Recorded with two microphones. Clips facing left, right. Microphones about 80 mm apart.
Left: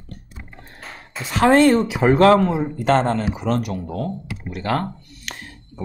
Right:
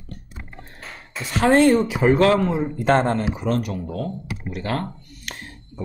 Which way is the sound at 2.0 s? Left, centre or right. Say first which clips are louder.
Left 4 dB; left.